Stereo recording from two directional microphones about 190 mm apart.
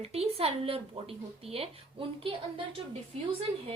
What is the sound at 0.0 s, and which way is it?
Speech, 30° right (ahead or behind).